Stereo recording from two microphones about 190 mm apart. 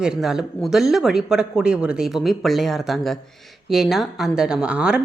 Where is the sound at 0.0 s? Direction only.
5° right (ahead or behind).